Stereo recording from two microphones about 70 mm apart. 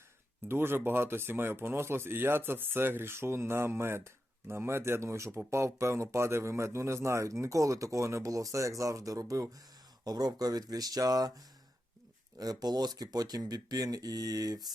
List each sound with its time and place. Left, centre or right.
0.4 s speech: right
10.0 s speech: right
12.4 s speech: right